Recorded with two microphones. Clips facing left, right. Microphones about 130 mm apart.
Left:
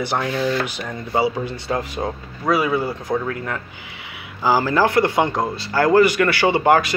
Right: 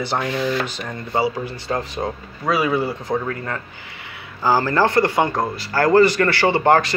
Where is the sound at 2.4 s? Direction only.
5° right (ahead or behind).